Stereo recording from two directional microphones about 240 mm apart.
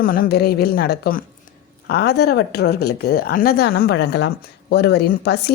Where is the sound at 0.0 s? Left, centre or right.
Left.